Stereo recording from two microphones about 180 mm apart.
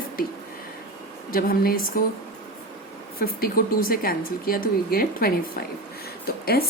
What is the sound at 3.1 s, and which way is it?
Speech, 55° left (ahead or behind).